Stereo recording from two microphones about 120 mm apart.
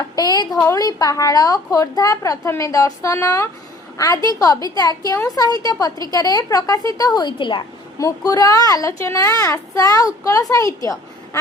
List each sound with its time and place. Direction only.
0.2 s a woman's voice: 35° left (ahead or behind)
3.9 s a woman's voice: 35° left (ahead or behind)
7.9 s a woman's voice: 30° left (ahead or behind)